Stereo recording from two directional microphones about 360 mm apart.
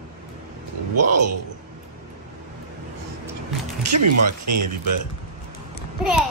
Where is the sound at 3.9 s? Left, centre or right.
Right.